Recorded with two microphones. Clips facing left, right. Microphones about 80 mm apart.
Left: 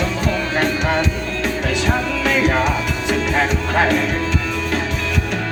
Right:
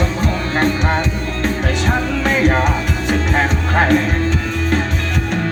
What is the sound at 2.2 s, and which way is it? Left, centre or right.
Music, right.